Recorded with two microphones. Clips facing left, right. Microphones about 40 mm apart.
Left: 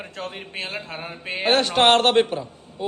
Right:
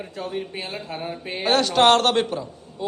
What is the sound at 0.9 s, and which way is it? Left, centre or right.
A man's voice, left.